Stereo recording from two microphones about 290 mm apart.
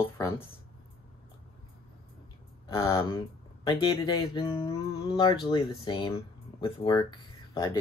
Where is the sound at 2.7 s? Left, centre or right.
Centre.